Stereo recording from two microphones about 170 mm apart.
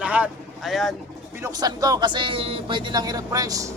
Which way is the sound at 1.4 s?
20° right (ahead or behind).